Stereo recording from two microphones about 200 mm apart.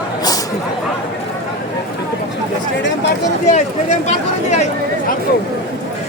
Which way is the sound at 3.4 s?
35° left (ahead or behind).